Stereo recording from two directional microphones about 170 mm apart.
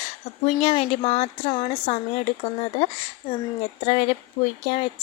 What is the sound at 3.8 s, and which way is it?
Speech, 35° left (ahead or behind).